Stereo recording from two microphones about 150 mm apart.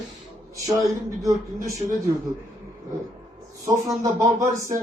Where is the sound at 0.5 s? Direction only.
20° right (ahead or behind).